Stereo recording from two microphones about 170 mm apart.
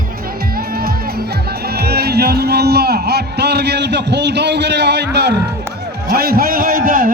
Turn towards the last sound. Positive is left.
turn(degrees=-55)  # may be behind; listen again after turning